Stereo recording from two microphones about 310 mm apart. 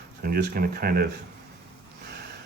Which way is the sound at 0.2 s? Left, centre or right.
Right.